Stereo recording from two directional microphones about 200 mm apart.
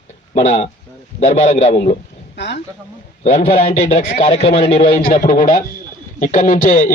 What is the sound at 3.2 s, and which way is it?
A man's voice, 40° left (ahead or behind).